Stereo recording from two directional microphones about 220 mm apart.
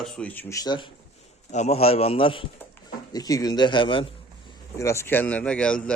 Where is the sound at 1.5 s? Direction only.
30° left (ahead or behind).